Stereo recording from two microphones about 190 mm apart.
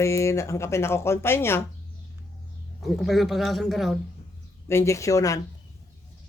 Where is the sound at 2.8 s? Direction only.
Centre (ahead or behind).